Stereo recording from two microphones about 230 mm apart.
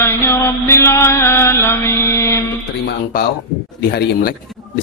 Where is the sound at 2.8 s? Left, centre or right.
Left.